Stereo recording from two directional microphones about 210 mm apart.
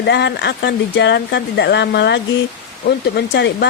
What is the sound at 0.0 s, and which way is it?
Speech, 55° left (ahead or behind).